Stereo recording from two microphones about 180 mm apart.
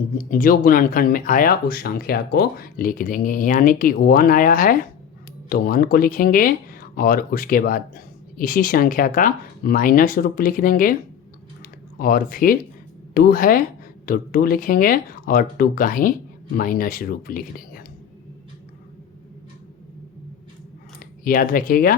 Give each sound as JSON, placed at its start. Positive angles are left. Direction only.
{"t": 0.2, "sound": "speech", "side_deg": 50}
{"t": 11.6, "sound": "typing", "side_deg": 55}
{"t": 13.1, "sound": "speech", "side_deg": 55}
{"t": 21.2, "sound": "speech", "side_deg": 50}